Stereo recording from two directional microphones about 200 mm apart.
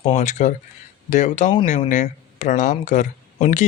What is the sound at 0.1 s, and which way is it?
Speech, 35° left (ahead or behind).